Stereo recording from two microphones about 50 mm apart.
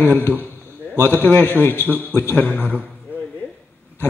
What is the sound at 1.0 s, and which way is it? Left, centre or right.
Speech, left.